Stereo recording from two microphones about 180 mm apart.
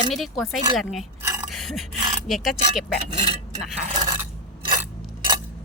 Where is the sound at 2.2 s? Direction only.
Centre (ahead or behind).